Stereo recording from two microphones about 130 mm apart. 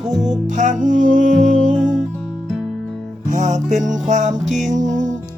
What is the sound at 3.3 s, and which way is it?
Music, 70° right (ahead or behind).